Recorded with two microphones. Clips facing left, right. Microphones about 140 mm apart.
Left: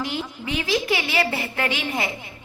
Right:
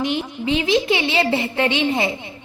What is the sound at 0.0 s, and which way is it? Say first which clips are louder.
A woman's voice: right 6 dB; 20° right (ahead or behind).